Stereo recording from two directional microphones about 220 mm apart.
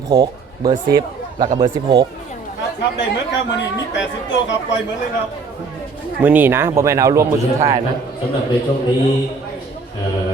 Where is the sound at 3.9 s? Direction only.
55° left (ahead or behind).